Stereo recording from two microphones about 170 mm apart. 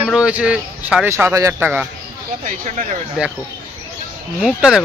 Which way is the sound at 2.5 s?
45° right (ahead or behind).